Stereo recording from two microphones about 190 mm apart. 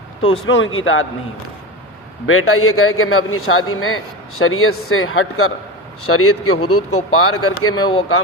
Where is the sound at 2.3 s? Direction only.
90° left.